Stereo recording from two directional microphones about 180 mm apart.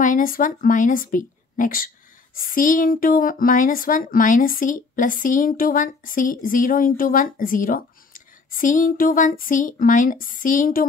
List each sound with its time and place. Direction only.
0.0 s speech: 50° left (ahead or behind)